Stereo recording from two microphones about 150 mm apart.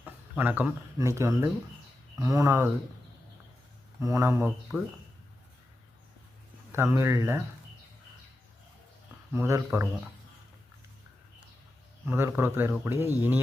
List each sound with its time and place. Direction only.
0.0 s a sound: 10° right (ahead or behind)
0.9 s speech: 20° right (ahead or behind)
4.0 s speech: 20° right (ahead or behind)
6.7 s speech: 15° right (ahead or behind)
9.3 s speech: 15° right (ahead or behind)
12.0 s speech: 15° right (ahead or behind)